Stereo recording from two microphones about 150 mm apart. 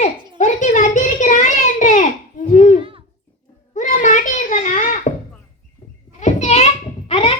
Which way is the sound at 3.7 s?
55° left (ahead or behind).